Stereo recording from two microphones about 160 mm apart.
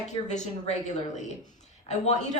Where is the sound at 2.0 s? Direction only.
45° left (ahead or behind).